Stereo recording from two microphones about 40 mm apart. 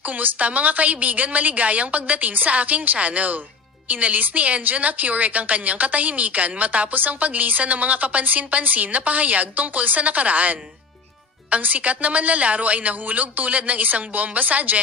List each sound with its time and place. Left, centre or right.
0.0 s a woman's voice: right